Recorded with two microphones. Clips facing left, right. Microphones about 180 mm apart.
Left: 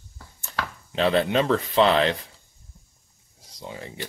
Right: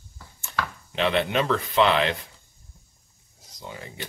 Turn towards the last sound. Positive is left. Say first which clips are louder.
# left 2 dB
turn(degrees=30)  # may be behind; listen again after turning